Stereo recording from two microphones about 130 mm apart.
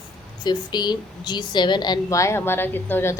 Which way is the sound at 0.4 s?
35° left (ahead or behind).